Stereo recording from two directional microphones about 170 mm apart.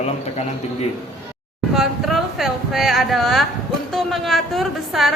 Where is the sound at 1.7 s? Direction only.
Centre (ahead or behind).